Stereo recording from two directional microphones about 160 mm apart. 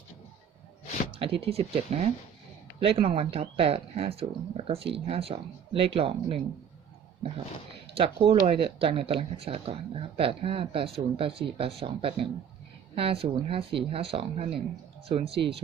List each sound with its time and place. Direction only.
1.1 s speech: 35° right (ahead or behind)
7.9 s speech: 35° right (ahead or behind)